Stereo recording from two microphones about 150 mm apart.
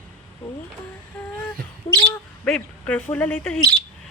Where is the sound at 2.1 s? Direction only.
10° left (ahead or behind).